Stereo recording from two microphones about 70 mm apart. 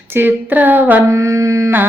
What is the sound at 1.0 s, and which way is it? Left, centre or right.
Mantra, right.